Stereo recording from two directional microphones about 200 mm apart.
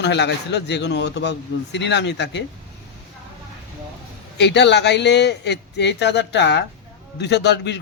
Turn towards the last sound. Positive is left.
turn(degrees=60)  # may be behind; listen again after turning